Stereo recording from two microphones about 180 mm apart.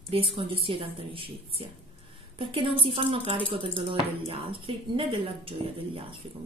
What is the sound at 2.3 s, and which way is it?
Speech, 30° right (ahead or behind).